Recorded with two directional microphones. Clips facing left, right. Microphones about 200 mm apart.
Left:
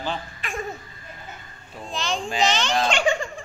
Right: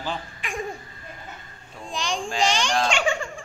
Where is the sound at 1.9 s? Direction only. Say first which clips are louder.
Left 1 dB; 15° right (ahead or behind).